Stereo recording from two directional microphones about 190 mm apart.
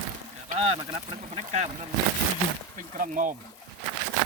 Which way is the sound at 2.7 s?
45° right (ahead or behind).